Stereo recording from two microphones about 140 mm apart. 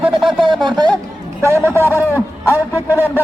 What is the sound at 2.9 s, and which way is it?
Speech, 15° right (ahead or behind).